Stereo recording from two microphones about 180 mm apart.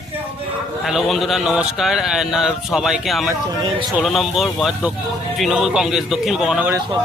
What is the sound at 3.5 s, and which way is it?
Speech, 25° right (ahead or behind).